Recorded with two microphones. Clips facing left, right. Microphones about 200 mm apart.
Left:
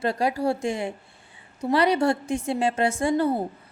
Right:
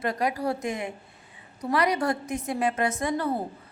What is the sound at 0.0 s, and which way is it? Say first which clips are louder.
A woman's voice: left 3 dB; 30° left (ahead or behind).